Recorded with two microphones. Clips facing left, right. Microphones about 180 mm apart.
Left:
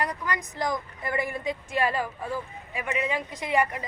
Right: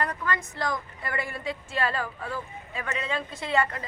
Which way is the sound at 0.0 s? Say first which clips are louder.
Even; 15° left (ahead or behind).